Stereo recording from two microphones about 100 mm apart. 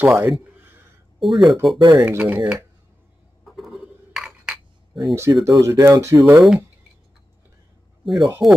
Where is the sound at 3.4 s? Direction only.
Centre (ahead or behind).